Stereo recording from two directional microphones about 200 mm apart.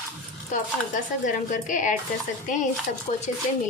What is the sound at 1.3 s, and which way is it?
Speech, 40° left (ahead or behind).